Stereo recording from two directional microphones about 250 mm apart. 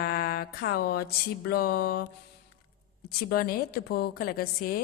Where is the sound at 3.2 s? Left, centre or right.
Left.